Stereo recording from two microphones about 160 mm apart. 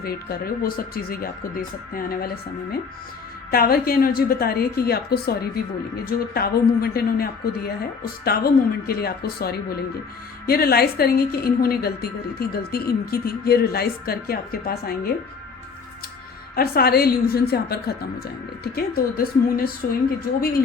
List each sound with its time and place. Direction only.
0.0 s a woman's voice: 70° left (ahead or behind)
3.5 s a woman's voice: 70° left (ahead or behind)
16.6 s a woman's voice: 75° left (ahead or behind)